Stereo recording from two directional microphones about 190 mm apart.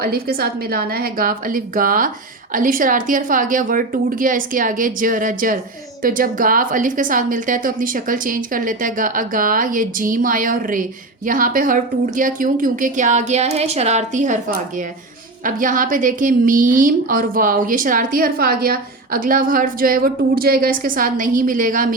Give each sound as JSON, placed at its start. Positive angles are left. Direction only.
{"t": 0.0, "sound": "a woman's voice", "side_deg": -55}